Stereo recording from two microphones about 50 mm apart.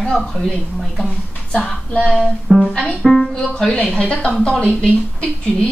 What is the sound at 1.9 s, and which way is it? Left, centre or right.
Speech, left.